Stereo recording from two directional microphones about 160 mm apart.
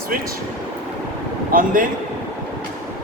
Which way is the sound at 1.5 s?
60° right (ahead or behind).